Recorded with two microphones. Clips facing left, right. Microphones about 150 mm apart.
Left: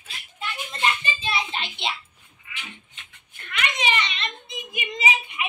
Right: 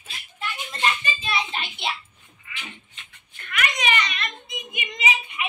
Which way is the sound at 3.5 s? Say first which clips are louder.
Right 1 dB; 25° left (ahead or behind).